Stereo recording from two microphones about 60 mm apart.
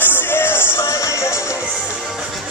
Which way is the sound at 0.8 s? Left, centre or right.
Left.